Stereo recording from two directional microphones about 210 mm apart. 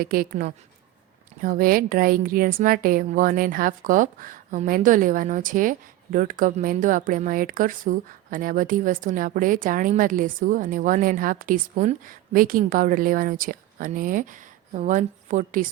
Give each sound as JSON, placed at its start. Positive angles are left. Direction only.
{"t": 0.0, "sound": "a woman's voice", "side_deg": -45}